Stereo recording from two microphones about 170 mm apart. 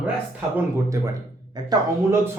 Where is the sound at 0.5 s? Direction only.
20° right (ahead or behind).